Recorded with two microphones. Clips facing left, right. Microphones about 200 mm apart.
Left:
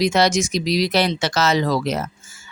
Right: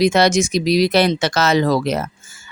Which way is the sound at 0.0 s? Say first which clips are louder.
Right 3 dB; 55° right (ahead or behind).